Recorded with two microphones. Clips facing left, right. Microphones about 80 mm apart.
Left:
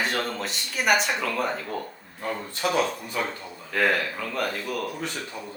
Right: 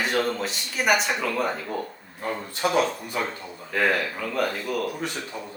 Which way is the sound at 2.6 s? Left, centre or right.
Centre.